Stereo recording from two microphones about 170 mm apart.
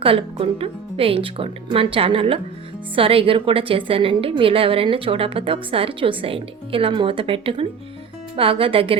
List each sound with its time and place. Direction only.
0.0 s a woman's voice: 30° right (ahead or behind)